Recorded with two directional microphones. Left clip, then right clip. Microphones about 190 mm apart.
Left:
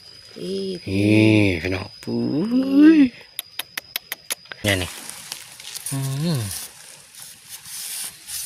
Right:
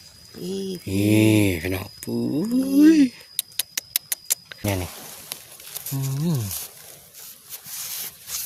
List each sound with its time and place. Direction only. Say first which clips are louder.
0.4 s a sound: left 3 dB; 20° right (ahead or behind)
0.9 s mantra: left 2 dB; centre (ahead or behind)
5.9 s sizzle: left 2 dB; centre (ahead or behind)